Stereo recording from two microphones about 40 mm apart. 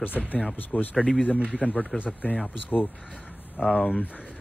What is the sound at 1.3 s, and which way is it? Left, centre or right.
Speech, right.